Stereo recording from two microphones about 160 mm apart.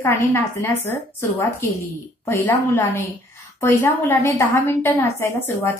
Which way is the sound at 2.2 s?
15° left (ahead or behind).